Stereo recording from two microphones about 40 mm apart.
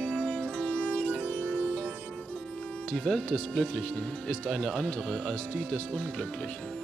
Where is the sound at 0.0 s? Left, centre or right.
Left.